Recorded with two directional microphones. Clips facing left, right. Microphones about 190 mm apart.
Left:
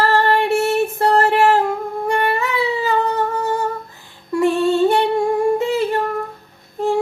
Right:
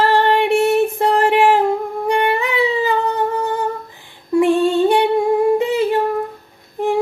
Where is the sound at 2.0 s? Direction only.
20° right (ahead or behind).